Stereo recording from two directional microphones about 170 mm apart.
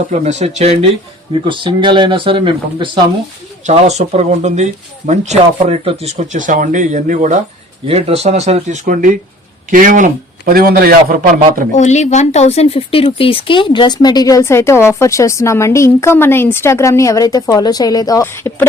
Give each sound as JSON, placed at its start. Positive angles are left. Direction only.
{"t": 0.1, "sound": "speech", "side_deg": -40}
{"t": 3.7, "sound": "speech", "side_deg": -40}
{"t": 7.9, "sound": "a man's voice", "side_deg": -35}
{"t": 11.7, "sound": "speech", "side_deg": 40}